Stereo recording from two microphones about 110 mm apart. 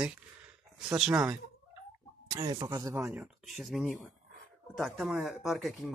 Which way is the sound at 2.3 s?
40° right (ahead or behind).